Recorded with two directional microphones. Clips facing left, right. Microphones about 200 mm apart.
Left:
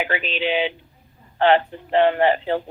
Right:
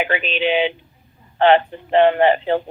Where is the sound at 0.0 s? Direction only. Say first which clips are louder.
Right 3 dB; 20° right (ahead or behind).